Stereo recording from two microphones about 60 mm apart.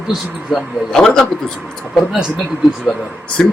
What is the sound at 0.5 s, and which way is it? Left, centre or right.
Speech, centre.